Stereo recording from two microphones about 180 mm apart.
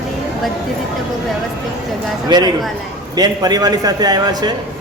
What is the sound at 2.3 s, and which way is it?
A man's voice, 25° right (ahead or behind).